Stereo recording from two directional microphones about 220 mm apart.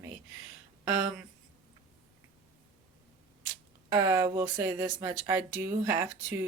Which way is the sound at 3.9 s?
15° right (ahead or behind).